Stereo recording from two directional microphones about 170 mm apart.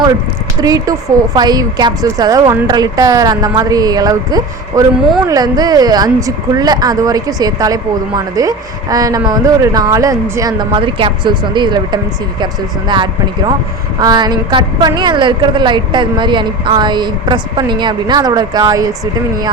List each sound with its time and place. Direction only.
0.6 s speech: 20° right (ahead or behind)
14.0 s speech: 25° right (ahead or behind)